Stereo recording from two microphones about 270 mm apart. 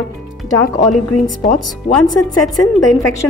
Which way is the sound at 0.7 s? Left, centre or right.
Left.